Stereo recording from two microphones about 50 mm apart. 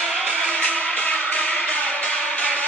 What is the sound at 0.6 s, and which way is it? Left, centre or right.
Music, left.